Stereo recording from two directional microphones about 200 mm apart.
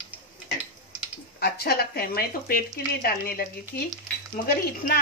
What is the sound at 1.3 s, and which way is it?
Speech, 50° left (ahead or behind).